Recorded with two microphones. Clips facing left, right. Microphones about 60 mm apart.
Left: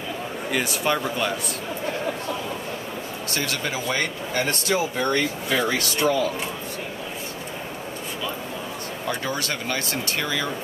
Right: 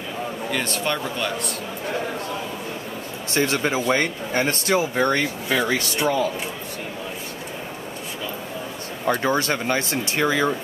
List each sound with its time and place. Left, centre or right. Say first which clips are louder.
0.5 s speech: left 2 dB; centre
3.3 s speech: right 7 dB; right
9.0 s speech: right 7 dB; right